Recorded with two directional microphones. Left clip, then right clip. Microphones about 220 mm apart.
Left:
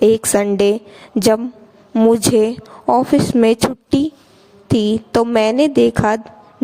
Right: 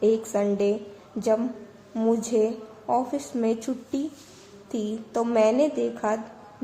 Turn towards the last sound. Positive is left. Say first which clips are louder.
# left 12 dB
turn(degrees=50)  # may be behind; listen again after turning